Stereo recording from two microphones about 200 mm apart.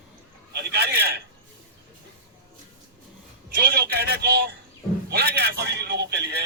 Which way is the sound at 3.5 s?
50° right (ahead or behind).